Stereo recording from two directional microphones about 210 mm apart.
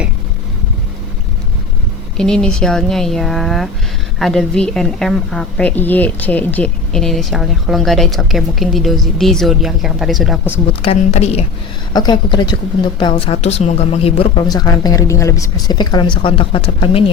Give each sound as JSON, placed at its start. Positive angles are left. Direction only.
{"t": 2.1, "sound": "a woman's voice", "side_deg": 5}
{"t": 10.8, "sound": "a woman's voice", "side_deg": 30}